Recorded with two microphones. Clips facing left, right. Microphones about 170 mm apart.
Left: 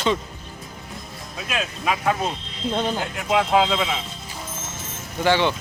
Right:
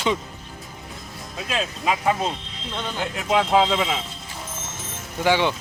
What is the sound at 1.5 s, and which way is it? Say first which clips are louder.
Speech: right 1 dB; 30° right (ahead or behind).